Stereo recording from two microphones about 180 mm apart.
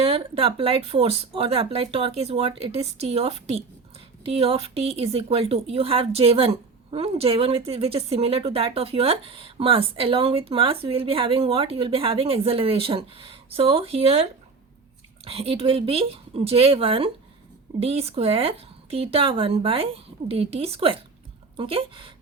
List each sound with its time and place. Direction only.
0.0 s a woman's voice: 30° right (ahead or behind)